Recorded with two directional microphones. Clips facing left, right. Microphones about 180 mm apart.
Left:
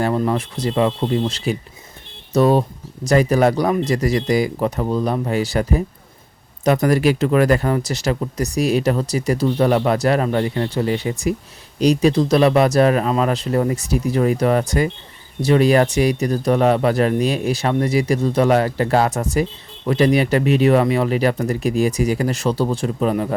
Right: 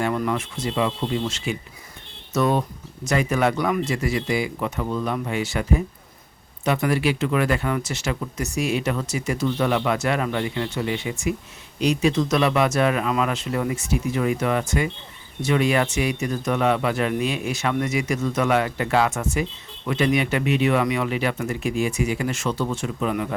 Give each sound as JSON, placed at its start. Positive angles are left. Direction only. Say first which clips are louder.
{"t": 0.0, "sound": "speech", "louder": "left 4 dB", "side_deg": 35}